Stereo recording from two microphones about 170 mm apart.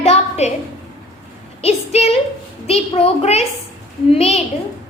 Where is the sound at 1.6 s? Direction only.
40° left (ahead or behind).